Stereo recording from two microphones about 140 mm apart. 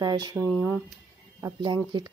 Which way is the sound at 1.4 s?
30° right (ahead or behind).